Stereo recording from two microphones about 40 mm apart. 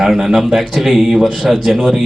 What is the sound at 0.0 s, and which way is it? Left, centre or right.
A man's voice, centre.